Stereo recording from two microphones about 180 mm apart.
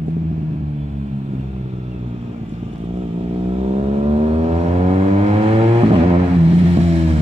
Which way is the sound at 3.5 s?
35° right (ahead or behind).